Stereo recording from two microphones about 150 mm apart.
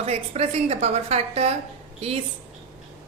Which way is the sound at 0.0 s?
45° right (ahead or behind).